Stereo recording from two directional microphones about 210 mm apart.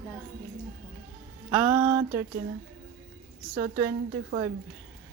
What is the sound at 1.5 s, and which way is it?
Speech, 10° right (ahead or behind).